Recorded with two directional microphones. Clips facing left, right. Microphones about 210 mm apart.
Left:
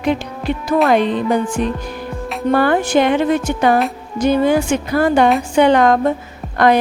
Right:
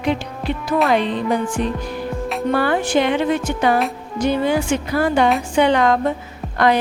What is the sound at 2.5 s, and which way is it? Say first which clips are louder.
Speech: left 4 dB; 50° left (ahead or behind).